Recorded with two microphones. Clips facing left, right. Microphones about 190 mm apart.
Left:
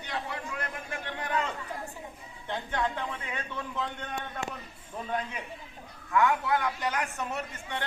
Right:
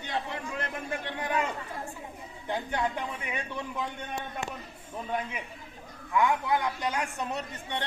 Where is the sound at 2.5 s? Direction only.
15° right (ahead or behind).